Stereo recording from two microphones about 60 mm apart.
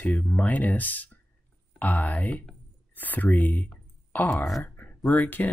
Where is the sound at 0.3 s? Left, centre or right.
Left.